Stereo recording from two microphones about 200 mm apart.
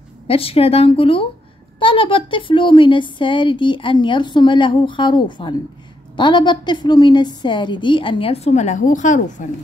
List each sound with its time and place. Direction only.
0.3 s speech: 30° left (ahead or behind)